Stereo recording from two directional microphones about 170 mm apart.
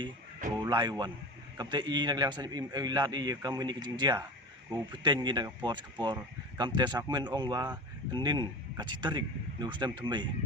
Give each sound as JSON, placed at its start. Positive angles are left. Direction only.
{"t": 0.6, "sound": "a man's voice", "side_deg": -25}